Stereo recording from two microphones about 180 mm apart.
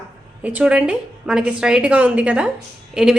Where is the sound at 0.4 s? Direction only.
5° right (ahead or behind).